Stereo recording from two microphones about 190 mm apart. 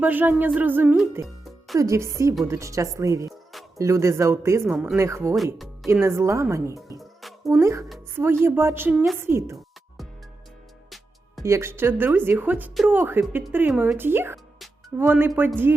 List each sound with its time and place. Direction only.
0.0 s a man's voice: 10° right (ahead or behind)
7.0 s music: centre (ahead or behind)
7.6 s a man's voice: 15° right (ahead or behind)
10.8 s music: centre (ahead or behind)
11.4 s a man's voice: 15° right (ahead or behind)